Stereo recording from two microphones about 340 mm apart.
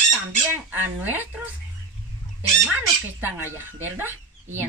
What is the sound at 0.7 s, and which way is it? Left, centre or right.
Speech, centre.